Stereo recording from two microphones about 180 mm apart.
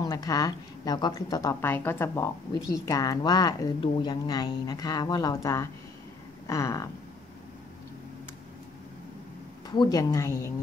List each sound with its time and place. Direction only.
0.0 s speech: 20° left (ahead or behind)
6.4 s a sound: 20° left (ahead or behind)
9.7 s speech: 20° left (ahead or behind)